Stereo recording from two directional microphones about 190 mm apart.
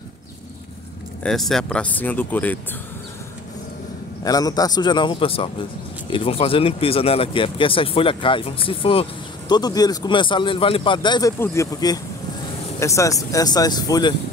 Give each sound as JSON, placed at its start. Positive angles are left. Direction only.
{"t": 1.2, "sound": "speech", "side_deg": 0}
{"t": 4.2, "sound": "speech", "side_deg": 20}